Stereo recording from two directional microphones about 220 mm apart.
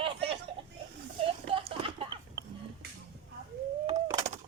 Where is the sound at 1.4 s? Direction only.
25° right (ahead or behind).